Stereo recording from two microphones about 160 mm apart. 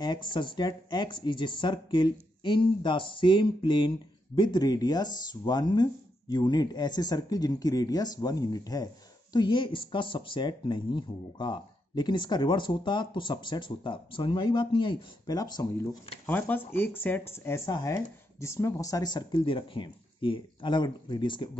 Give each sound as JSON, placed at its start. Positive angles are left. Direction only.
{"t": 0.0, "sound": "speech", "side_deg": 30}
{"t": 16.3, "sound": "speech", "side_deg": 10}